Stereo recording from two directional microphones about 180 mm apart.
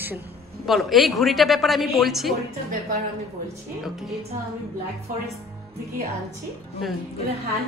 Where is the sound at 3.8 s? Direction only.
Centre (ahead or behind).